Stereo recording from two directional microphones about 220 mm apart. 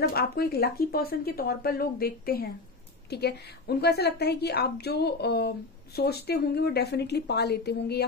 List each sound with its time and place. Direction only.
0.1 s a woman's voice: 45° left (ahead or behind)